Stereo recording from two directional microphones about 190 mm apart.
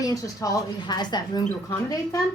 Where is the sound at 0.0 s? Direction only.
20° left (ahead or behind).